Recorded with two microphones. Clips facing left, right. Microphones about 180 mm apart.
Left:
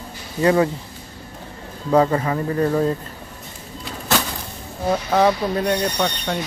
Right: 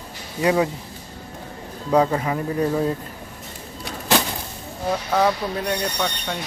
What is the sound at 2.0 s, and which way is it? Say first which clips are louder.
Speech: left 2 dB; 5° right (ahead or behind).